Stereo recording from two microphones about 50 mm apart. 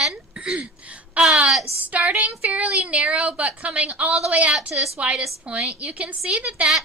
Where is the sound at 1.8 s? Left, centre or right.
Right.